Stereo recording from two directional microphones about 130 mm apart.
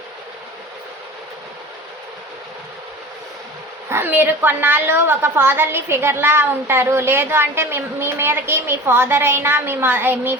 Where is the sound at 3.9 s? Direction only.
15° right (ahead or behind).